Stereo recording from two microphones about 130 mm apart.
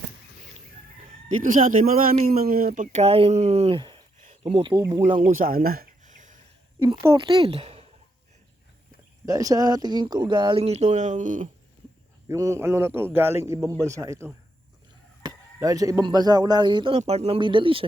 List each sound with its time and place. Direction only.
1.4 s speech: 90° right; by 3.8 s 55° right (ahead or behind)
3.8 s a sound: 40° right (ahead or behind)
4.4 s speech: 45° right (ahead or behind)
5.2 s a sound: 85° right
7.2 s speech: 35° right (ahead or behind)
7.4 s speech: 50° right (ahead or behind)
9.2 s speech: 25° right (ahead or behind)
10.6 s speech: 55° right (ahead or behind); by 11.4 s 75° right (ahead or behind)
12.3 s speech: 25° right (ahead or behind)
16.9 s speech: 55° right (ahead or behind)